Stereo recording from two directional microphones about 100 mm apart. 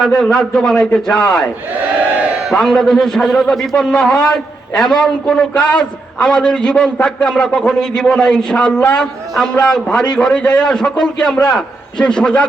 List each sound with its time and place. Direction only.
0.0 s a man's voice: 5° left (ahead or behind)
2.5 s a man's voice: 5° left (ahead or behind)